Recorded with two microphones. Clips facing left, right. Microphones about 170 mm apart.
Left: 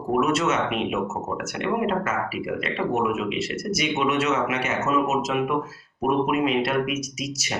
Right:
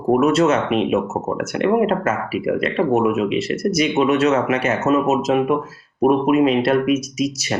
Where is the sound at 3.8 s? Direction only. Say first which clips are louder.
Right 7 dB; 35° right (ahead or behind).